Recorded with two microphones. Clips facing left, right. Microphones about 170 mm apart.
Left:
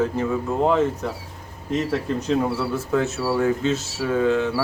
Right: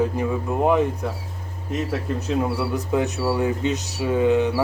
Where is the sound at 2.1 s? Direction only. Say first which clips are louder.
Even; 10° right (ahead or behind).